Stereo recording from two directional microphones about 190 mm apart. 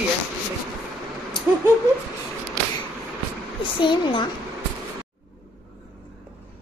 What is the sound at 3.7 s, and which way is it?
Speech, 25° left (ahead or behind).